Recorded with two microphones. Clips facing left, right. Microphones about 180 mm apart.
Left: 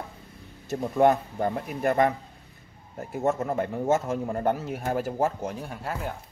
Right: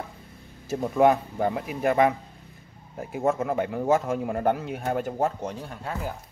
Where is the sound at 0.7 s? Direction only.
Centre (ahead or behind).